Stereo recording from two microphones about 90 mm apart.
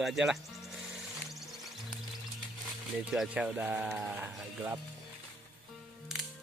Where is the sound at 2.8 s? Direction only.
5° right (ahead or behind).